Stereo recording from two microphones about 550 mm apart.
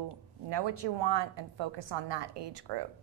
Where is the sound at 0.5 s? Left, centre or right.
Right.